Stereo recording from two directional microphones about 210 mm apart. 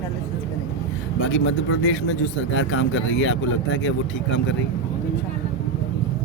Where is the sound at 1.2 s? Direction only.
60° left (ahead or behind).